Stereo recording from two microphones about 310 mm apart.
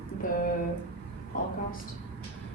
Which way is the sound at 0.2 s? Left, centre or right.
Left.